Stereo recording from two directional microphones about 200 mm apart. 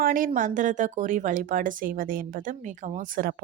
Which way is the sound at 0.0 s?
45° right (ahead or behind).